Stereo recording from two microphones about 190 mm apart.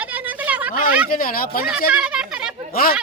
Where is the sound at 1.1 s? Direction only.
50° left (ahead or behind).